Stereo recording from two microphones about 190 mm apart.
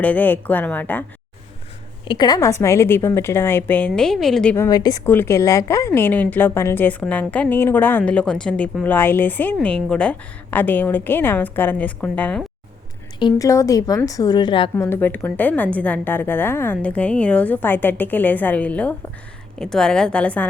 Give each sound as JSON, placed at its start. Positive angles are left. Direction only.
{"t": 0.0, "sound": "a woman's voice", "side_deg": 10}
{"t": 2.0, "sound": "a woman's voice", "side_deg": 20}
{"t": 4.5, "sound": "a woman's voice", "side_deg": 15}
{"t": 13.1, "sound": "a woman's voice", "side_deg": 20}
{"t": 14.8, "sound": "a woman's voice", "side_deg": 15}